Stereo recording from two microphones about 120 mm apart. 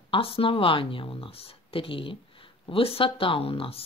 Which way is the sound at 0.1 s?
50° left (ahead or behind).